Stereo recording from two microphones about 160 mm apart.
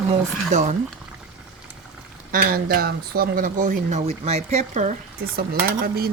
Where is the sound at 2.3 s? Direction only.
65° right (ahead or behind); by 5.0 s 45° right (ahead or behind).